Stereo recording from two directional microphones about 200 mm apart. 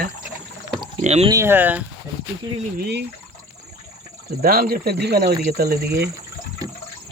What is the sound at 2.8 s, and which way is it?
Speech, 55° right (ahead or behind).